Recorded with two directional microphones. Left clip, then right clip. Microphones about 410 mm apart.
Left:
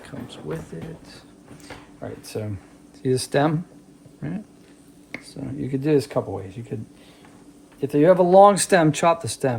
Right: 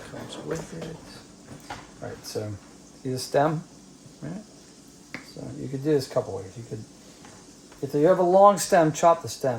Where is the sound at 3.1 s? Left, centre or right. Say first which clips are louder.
Even; left.